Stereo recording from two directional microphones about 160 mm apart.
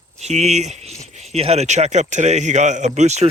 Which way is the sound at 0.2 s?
45° right (ahead or behind).